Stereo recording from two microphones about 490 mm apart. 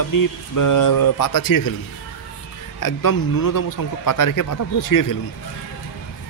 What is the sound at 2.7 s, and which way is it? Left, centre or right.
Speech, left.